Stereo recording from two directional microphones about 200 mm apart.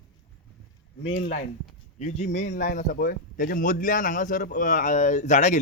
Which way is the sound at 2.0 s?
35° left (ahead or behind).